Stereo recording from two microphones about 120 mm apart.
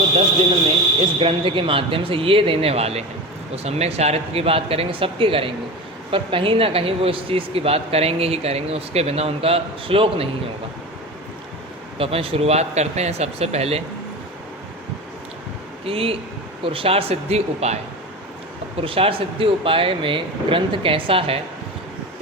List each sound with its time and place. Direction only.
1.2 s speech: 50° right (ahead or behind)
11.9 s speech: 50° right (ahead or behind)
15.8 s speech: 50° right (ahead or behind)
18.8 s speech: 50° right (ahead or behind)